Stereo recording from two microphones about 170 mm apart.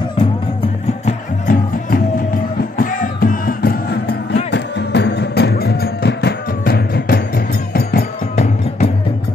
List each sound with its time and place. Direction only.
1.0 s music: 55° left (ahead or behind); by 4.4 s 70° left (ahead or behind)
4.5 s music: 90° left; by 8.0 s 70° left (ahead or behind)
8.4 s music: 40° left (ahead or behind)